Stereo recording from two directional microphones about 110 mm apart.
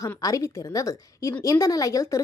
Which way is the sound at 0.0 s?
30° left (ahead or behind).